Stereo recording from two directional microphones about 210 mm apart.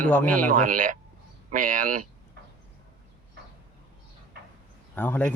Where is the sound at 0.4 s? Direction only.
40° right (ahead or behind).